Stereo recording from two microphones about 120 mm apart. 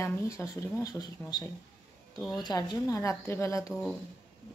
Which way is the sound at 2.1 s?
Centre (ahead or behind).